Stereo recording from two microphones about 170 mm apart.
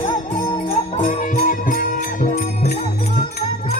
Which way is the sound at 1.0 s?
55° left (ahead or behind).